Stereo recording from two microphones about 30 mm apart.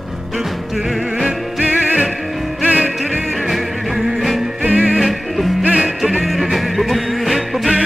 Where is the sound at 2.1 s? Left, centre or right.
Centre.